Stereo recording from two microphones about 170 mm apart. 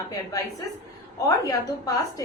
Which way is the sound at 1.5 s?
20° left (ahead or behind).